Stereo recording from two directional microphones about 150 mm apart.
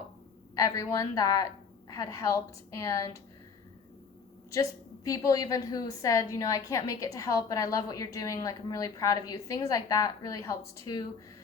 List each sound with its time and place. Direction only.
0.5 s a woman's voice: 20° left (ahead or behind)
4.5 s a woman's voice: 20° left (ahead or behind)